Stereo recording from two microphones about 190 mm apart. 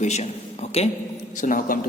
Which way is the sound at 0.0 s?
35° left (ahead or behind).